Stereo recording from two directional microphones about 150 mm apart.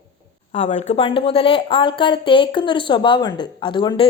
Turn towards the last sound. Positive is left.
turn(degrees=35)  # may be behind; listen again after turning